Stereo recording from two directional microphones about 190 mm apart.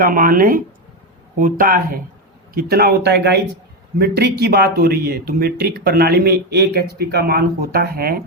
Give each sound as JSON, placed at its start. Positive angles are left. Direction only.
{"t": 0.0, "sound": "speech", "side_deg": -50}